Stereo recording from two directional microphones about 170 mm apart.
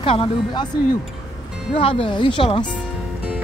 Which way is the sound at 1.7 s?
30° left (ahead or behind).